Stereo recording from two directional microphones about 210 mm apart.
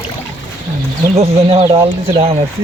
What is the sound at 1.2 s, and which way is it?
Speech, 30° right (ahead or behind).